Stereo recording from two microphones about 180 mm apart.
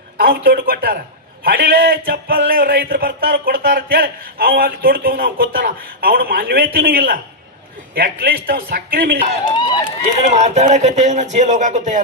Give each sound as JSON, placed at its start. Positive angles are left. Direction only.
{"t": 0.2, "sound": "a man's voice", "side_deg": -55}
{"t": 1.5, "sound": "a sound", "side_deg": -55}
{"t": 9.6, "sound": "speech", "side_deg": 25}
{"t": 10.2, "sound": "speech", "side_deg": -40}